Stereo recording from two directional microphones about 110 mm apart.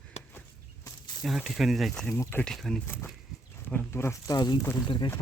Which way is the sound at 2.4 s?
5° left (ahead or behind).